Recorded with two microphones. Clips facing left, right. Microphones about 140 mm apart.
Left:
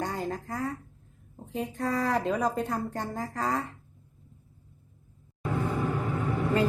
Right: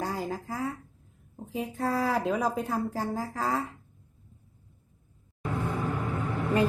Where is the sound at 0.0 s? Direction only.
Centre (ahead or behind).